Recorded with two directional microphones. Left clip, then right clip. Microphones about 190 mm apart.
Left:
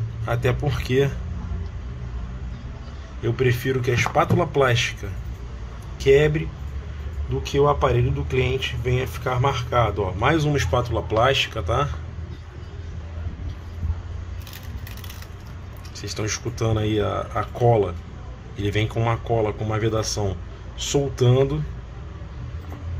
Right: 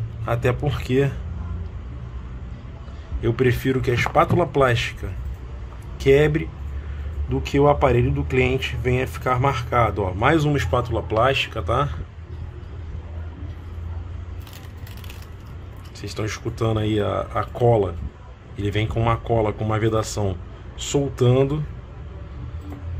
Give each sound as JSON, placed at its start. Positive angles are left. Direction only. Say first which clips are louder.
{"t": 0.2, "sound": "speech", "louder": "right 1 dB", "side_deg": -15}
{"t": 3.2, "sound": "speech", "louder": "right 2 dB", "side_deg": -20}
{"t": 16.0, "sound": "speech", "louder": "left 1 dB", "side_deg": -15}